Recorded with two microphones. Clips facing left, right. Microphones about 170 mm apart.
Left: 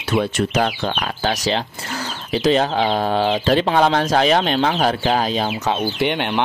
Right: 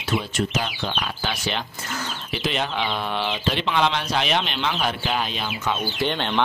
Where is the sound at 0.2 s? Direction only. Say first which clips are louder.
Left 7 dB; 65° left (ahead or behind); by 5.8 s 40° left (ahead or behind).